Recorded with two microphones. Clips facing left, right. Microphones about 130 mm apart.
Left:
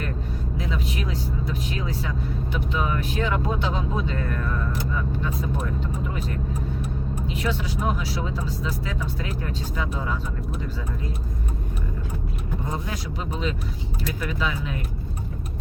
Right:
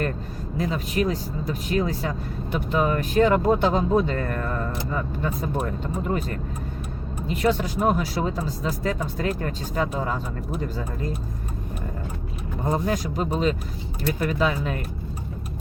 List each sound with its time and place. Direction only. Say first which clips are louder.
0.5 s speech: right 6 dB; 45° right (ahead or behind)
12.6 s speech: right 10 dB; 45° right (ahead or behind)